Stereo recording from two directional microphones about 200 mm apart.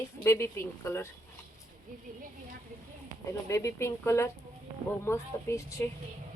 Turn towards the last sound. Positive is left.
turn(degrees=15)  # may be behind; listen again after turning